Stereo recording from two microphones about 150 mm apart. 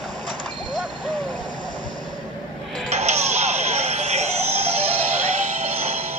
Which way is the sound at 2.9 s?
45° right (ahead or behind).